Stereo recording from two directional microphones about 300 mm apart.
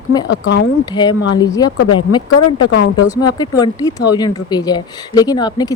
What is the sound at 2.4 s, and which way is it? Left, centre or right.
Speech, left.